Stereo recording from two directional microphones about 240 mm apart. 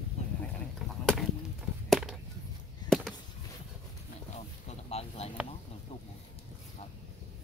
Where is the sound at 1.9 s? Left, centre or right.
Centre.